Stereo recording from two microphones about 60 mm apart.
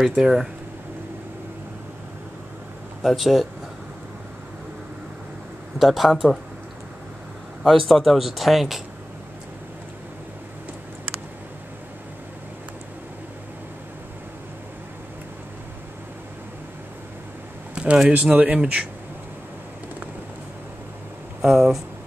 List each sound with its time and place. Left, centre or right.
0.1 s speech: centre
3.0 s speech: centre
5.8 s speech: centre
7.6 s speech: centre
17.7 s speech: centre
18.1 s speech: right
18.6 s speech: centre
21.4 s speech: centre